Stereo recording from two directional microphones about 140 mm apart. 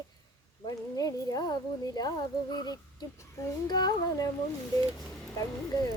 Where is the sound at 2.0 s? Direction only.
30° left (ahead or behind).